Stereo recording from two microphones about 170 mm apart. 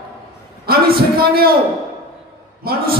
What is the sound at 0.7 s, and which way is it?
Speech, 65° right (ahead or behind).